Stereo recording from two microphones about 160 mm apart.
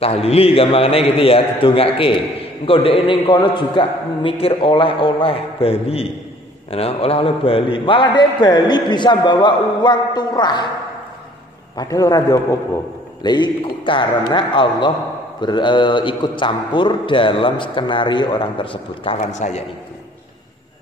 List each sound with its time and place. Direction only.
0.0 s a man's voice: 40° left (ahead or behind)
11.7 s a man's voice: 20° left (ahead or behind)
19.3 s a man's voice: 45° left (ahead or behind)